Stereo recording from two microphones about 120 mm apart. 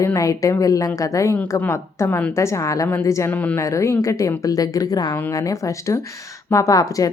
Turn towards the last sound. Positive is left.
turn(degrees=30)  # may be behind; listen again after turning